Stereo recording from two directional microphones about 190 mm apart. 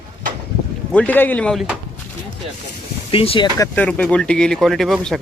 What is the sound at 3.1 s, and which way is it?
Speech, 30° left (ahead or behind).